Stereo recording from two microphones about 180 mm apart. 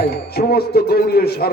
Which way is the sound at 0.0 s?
60° left (ahead or behind).